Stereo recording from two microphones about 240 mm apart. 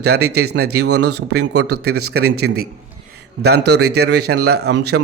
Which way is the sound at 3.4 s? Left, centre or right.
Right.